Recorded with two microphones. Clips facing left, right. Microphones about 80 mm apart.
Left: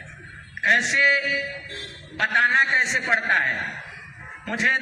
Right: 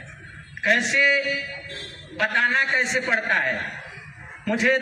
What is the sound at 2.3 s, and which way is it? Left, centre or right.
A man's voice, left.